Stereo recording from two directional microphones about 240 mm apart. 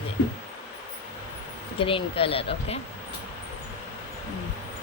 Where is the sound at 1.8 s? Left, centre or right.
Left.